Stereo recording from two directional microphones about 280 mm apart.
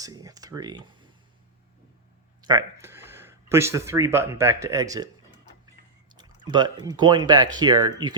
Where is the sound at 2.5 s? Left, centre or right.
Centre.